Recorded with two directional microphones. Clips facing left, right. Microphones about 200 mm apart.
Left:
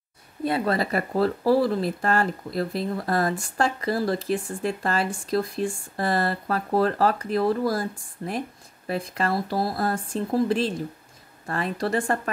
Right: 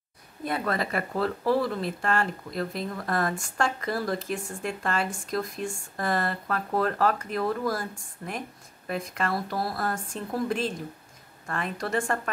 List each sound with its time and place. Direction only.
0.4 s speech: 30° left (ahead or behind)